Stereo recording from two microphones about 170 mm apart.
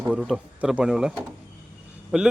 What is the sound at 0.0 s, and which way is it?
Speech, 10° right (ahead or behind).